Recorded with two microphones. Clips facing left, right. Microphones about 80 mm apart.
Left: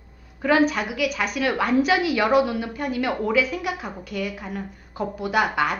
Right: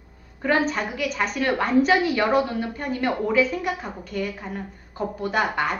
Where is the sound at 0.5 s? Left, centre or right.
Centre.